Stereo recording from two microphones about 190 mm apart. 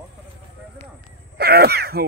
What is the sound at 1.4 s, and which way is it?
Throat clearing, 55° right (ahead or behind).